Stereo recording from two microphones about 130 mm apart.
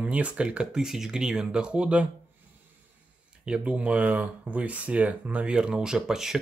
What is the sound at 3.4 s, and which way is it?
Speech, 10° right (ahead or behind).